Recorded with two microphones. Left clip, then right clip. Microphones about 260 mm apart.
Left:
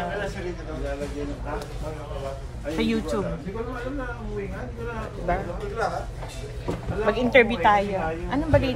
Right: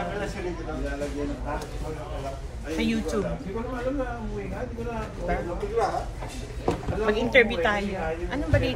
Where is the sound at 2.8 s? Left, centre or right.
Left.